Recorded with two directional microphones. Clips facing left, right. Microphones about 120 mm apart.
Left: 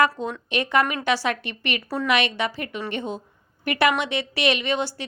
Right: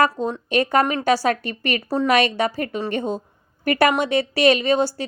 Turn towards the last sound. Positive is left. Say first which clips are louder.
# right 6 dB
turn(degrees=-40)  # may be behind; listen again after turning